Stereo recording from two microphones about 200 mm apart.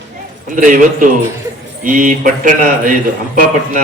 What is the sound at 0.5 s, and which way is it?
A man's voice, 40° right (ahead or behind).